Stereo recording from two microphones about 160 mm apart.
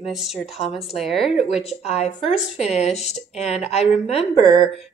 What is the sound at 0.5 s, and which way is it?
Speech, 40° left (ahead or behind).